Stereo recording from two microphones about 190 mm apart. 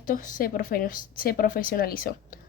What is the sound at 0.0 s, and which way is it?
A woman's voice, 45° left (ahead or behind).